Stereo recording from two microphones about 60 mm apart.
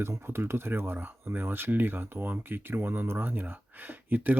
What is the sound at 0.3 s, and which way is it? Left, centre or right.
Speech, right.